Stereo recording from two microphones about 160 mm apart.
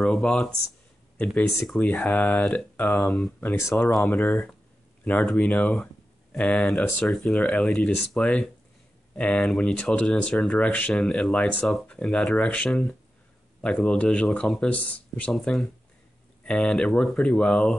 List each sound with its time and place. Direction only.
0.0 s speech: centre (ahead or behind)
3.0 s speech: centre (ahead or behind)
3.5 s speech: 20° left (ahead or behind)
3.9 s speech: centre (ahead or behind)